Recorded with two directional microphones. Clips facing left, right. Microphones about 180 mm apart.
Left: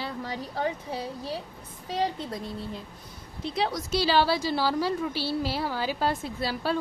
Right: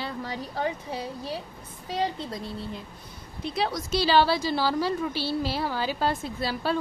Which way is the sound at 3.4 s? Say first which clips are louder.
Even; 20° left (ahead or behind).